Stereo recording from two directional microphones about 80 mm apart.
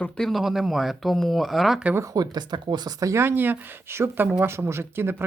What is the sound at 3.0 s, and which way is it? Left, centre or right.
Speech, right.